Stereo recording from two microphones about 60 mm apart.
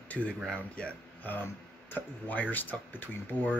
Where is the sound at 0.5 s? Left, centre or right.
Centre.